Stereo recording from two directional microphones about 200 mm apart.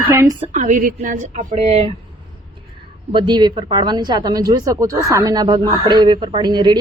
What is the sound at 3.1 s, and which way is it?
Speech, 25° right (ahead or behind).